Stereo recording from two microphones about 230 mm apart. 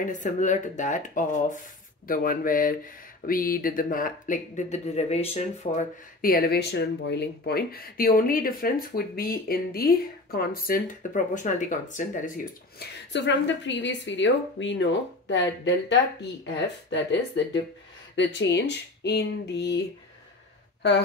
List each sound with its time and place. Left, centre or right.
0.0 s speech: left
12.7 s a woman's voice: left